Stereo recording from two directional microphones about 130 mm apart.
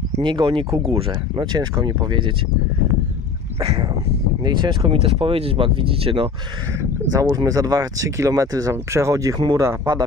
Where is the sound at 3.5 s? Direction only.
45° right (ahead or behind).